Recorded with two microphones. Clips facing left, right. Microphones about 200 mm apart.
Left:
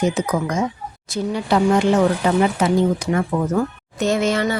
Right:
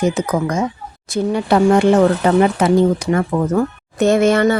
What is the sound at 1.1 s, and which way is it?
A woman's voice, 55° right (ahead or behind).